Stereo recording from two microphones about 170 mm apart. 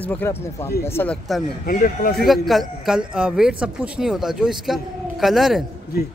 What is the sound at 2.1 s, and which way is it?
Speech, centre (ahead or behind).